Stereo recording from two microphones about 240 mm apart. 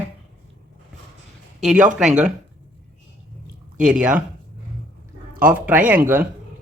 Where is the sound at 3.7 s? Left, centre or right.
Centre.